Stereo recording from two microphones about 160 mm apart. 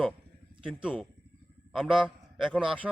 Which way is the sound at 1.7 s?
Centre (ahead or behind).